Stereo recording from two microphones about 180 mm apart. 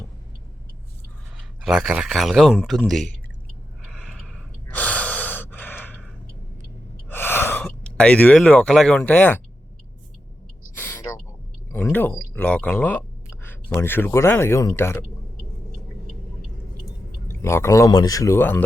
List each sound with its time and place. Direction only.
1.4 s speech: 5° right (ahead or behind)
3.8 s gasp: centre (ahead or behind)
7.1 s speech: 10° left (ahead or behind)
10.8 s gasp: 15° left (ahead or behind)
11.7 s speech: 10° left (ahead or behind)
17.2 s speech: 15° left (ahead or behind)